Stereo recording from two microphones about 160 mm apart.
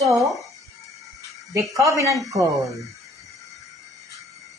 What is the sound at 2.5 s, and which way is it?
Speech, centre (ahead or behind).